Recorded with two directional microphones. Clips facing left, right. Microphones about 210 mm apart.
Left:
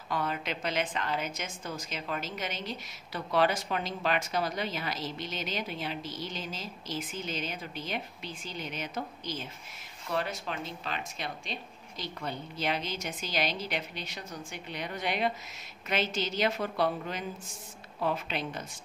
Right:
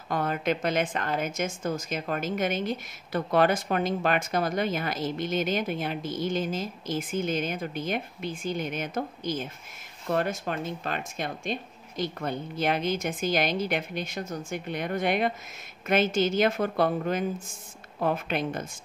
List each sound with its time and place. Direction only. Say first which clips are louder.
0.1 s a woman's voice: right 6 dB; 50° right (ahead or behind)